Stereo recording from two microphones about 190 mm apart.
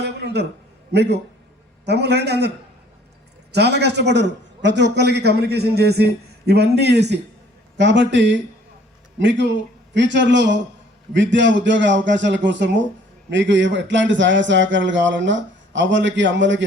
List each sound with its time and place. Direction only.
0.0 s a sound: 60° right (ahead or behind)
0.9 s a man's voice: 60° right (ahead or behind)
3.5 s a man's voice: 60° right (ahead or behind)